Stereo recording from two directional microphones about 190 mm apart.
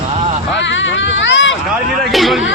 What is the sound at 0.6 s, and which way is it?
Speech, 75° left (ahead or behind).